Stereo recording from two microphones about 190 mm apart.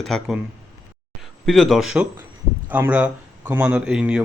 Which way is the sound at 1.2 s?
Centre (ahead or behind).